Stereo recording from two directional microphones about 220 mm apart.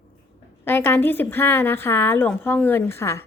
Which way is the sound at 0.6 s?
10° left (ahead or behind).